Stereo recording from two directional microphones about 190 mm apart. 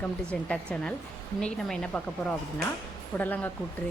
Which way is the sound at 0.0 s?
5° left (ahead or behind).